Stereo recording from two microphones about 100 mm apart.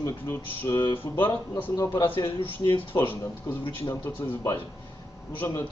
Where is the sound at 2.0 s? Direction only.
55° left (ahead or behind).